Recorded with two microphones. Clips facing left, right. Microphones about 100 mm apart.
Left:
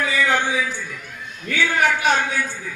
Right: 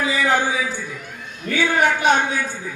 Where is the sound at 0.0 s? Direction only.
10° right (ahead or behind).